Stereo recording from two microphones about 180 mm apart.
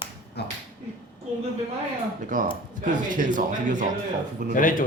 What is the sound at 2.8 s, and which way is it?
Speech, 45° right (ahead or behind).